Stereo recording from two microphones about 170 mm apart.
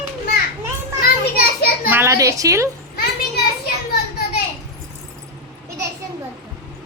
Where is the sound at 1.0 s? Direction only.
60° left (ahead or behind).